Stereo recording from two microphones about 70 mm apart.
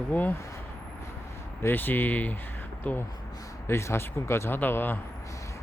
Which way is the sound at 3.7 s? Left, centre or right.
Left.